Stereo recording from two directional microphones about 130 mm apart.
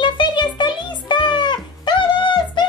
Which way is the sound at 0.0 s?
35° left (ahead or behind).